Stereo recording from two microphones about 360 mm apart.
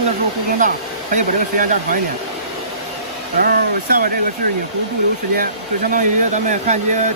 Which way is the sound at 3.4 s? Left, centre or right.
Right.